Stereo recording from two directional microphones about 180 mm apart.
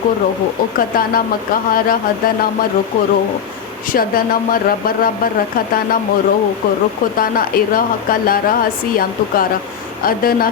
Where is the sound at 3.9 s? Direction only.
55° left (ahead or behind).